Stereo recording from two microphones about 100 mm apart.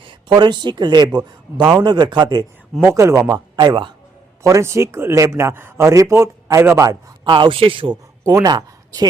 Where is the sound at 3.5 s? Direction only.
50° right (ahead or behind).